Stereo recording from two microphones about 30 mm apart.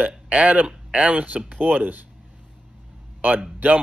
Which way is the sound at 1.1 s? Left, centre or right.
Right.